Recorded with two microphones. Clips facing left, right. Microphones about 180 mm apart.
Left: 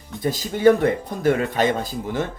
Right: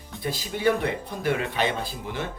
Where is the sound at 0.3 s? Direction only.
45° left (ahead or behind).